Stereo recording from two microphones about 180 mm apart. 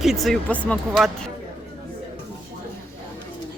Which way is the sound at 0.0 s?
Centre (ahead or behind).